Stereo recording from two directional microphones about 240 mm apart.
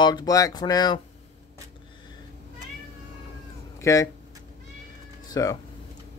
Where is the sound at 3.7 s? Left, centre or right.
Centre.